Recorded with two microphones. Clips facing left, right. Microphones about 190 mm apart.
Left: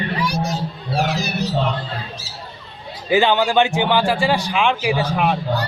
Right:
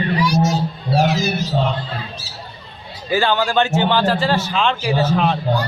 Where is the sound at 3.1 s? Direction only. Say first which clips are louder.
Left 2 dB; 15° left (ahead or behind).